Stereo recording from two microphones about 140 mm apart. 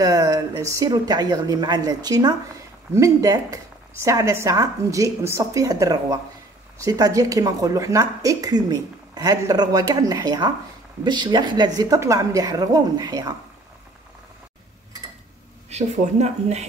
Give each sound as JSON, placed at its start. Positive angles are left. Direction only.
{"t": 0.0, "sound": "speech", "side_deg": -25}
{"t": 15.7, "sound": "speech", "side_deg": -50}